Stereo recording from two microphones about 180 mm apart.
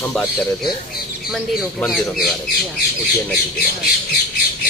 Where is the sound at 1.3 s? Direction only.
Centre (ahead or behind).